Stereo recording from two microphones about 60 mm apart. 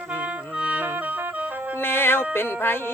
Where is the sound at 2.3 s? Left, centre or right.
Left.